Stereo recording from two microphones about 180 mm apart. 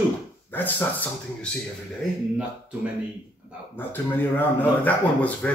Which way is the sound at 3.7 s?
10° left (ahead or behind).